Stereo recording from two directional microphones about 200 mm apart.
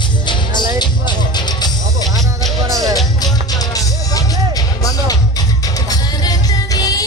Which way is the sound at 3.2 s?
20° left (ahead or behind).